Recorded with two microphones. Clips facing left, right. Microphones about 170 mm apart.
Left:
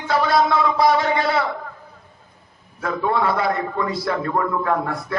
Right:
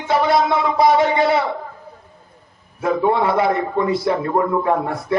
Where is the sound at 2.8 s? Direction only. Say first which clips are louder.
Right 4 dB; 20° right (ahead or behind).